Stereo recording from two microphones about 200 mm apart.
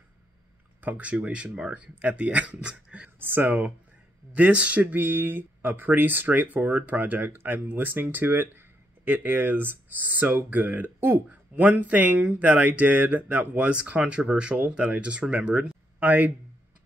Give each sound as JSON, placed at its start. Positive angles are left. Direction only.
{"t": 0.7, "sound": "speech", "side_deg": -10}